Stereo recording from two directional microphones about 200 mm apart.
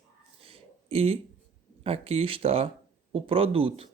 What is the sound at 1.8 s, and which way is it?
Speech, 30° right (ahead or behind).